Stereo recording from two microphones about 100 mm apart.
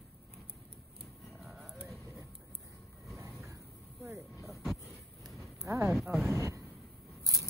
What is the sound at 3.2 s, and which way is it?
Vehicle, 30° right (ahead or behind).